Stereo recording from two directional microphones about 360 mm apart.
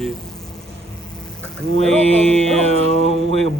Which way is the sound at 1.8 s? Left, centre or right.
Centre.